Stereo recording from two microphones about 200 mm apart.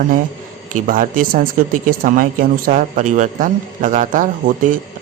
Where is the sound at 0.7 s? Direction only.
40° right (ahead or behind).